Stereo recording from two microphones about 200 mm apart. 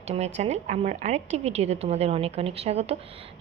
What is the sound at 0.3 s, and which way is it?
A woman's voice, 35° right (ahead or behind).